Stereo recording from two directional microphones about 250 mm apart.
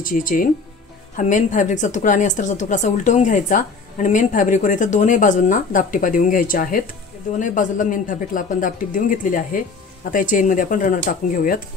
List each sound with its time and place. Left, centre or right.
0.0 s a woman's voice: left